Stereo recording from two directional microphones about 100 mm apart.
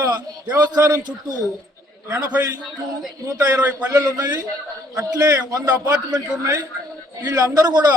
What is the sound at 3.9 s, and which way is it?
A man's voice, 40° right (ahead or behind).